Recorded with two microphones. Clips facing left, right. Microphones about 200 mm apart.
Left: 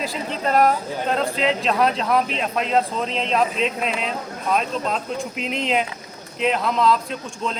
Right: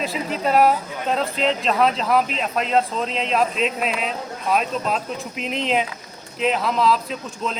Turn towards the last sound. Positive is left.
turn(degrees=0)  # may be behind; listen again after turning